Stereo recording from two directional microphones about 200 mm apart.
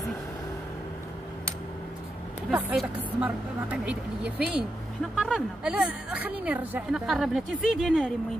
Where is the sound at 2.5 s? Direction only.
5° right (ahead or behind).